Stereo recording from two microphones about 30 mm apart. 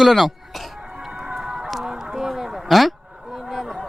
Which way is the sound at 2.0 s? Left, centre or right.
Centre.